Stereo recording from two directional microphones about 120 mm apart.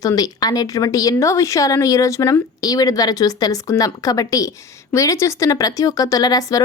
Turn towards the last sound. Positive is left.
turn(degrees=30)  # may be behind; listen again after turning